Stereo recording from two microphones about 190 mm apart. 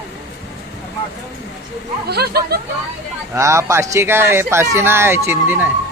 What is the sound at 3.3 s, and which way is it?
Speech, 15° right (ahead or behind).